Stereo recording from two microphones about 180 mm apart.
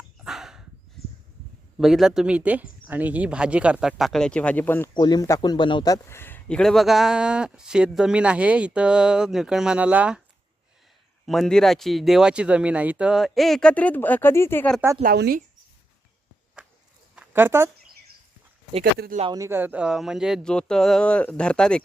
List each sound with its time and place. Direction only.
0.3 s dog: centre (ahead or behind)
1.8 s speech: centre (ahead or behind)
4.9 s speech: 25° left (ahead or behind); by 10.2 s 5° right (ahead or behind)
11.3 s speech: 5° left (ahead or behind)
15.0 s speech: 60° right (ahead or behind)
17.2 s a sound: 10° right (ahead or behind)
18.8 s speech: 50° right (ahead or behind)
19.2 s speech: 20° right (ahead or behind); by 21.8 s 5° left (ahead or behind)